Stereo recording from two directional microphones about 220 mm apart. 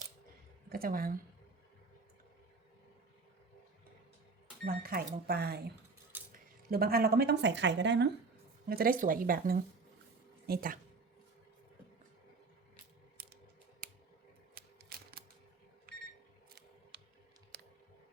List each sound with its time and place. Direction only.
0.7 s speech: 40° right (ahead or behind)
4.6 s a woman's voice: 40° right (ahead or behind)
8.7 s a woman's voice: 40° right (ahead or behind)
14.5 s typewriter: 45° right (ahead or behind)
15.9 s a sound: 40° right (ahead or behind)
16.9 s computer keyboard: 50° right (ahead or behind)
17.5 s a sound: 45° right (ahead or behind)